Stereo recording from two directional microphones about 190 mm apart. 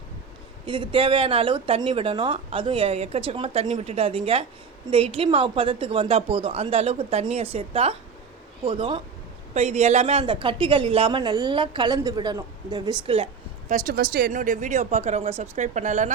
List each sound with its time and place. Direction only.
0.6 s a woman's voice: 25° right (ahead or behind)
13.7 s a woman's voice: 45° right (ahead or behind)